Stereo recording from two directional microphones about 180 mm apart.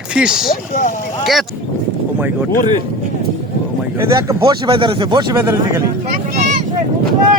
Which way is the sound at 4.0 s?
20° right (ahead or behind).